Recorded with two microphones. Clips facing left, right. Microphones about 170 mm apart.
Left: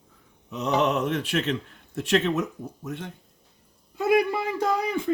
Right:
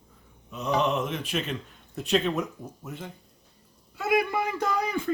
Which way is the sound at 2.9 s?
75° left (ahead or behind).